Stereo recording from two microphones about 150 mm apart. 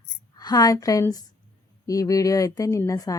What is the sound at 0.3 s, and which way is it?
Speech, 25° left (ahead or behind).